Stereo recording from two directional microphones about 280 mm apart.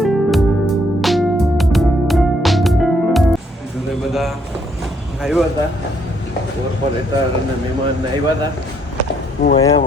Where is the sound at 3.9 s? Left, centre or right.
Centre.